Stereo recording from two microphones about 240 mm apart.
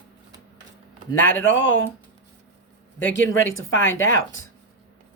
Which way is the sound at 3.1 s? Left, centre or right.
Left.